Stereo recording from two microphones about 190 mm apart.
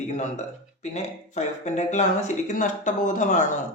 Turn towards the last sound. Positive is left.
turn(degrees=40)  # may be behind; listen again after turning